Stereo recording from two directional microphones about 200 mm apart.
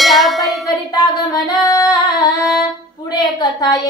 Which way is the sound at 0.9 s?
20° left (ahead or behind).